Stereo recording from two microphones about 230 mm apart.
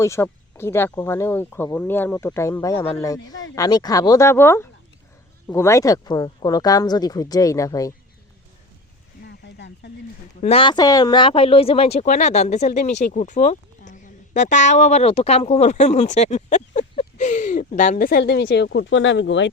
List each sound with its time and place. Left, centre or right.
0.0 s speech: centre
9.2 s a sound: left
10.4 s speech: left